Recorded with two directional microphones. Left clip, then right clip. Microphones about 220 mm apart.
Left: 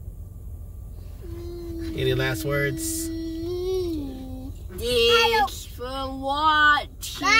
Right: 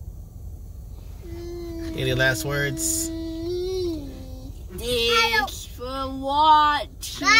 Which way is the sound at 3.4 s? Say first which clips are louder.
Even; 10° left (ahead or behind).